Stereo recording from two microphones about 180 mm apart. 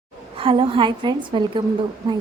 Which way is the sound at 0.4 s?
30° right (ahead or behind).